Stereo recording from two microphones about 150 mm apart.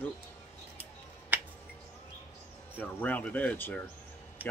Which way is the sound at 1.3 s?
10° right (ahead or behind).